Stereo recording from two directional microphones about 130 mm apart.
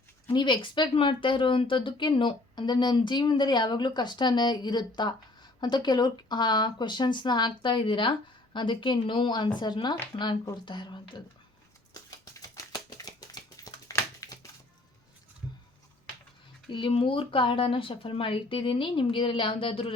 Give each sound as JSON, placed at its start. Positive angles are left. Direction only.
{"t": 0.3, "sound": "speech", "side_deg": 35}
{"t": 12.2, "sound": "a sound", "side_deg": 25}
{"t": 16.6, "sound": "speech", "side_deg": 40}